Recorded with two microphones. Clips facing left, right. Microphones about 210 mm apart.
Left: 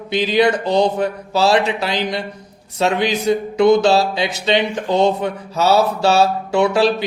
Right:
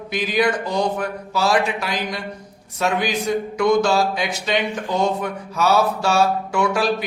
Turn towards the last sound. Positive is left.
turn(degrees=25)  # may be behind; listen again after turning